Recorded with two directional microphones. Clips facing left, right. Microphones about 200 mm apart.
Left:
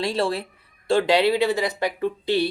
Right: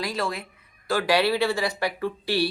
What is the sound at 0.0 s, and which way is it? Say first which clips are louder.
Speech: left 5 dB; 30° left (ahead or behind).